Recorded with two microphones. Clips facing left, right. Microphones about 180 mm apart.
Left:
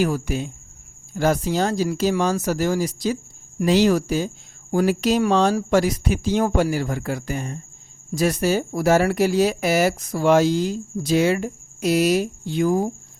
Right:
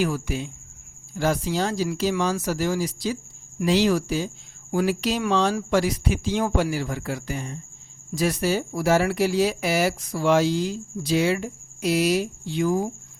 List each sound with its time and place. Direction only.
0.0 s speech: 45° left (ahead or behind)